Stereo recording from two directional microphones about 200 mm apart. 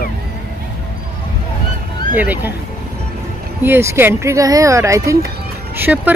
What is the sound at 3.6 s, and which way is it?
Speech, 10° right (ahead or behind).